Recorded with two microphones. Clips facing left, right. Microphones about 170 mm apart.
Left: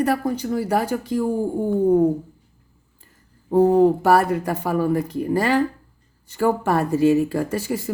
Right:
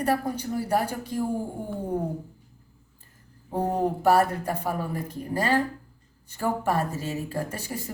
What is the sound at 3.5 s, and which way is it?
Speech, 90° left.